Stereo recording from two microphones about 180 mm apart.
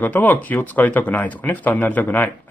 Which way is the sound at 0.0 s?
10° left (ahead or behind).